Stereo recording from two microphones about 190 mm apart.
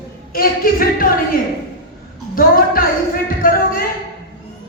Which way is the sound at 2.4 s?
50° left (ahead or behind).